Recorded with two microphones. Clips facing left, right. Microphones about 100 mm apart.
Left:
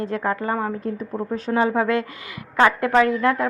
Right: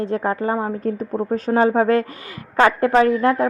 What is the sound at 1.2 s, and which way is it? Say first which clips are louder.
A woman's voice: right 4 dB; 40° right (ahead or behind).